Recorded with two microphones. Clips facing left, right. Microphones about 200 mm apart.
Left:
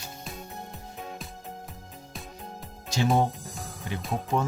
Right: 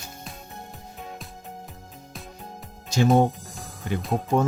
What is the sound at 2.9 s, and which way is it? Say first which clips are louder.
Speech: right 5 dB; 45° right (ahead or behind).